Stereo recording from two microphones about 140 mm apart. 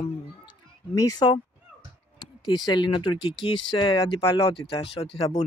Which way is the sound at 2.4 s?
30° left (ahead or behind).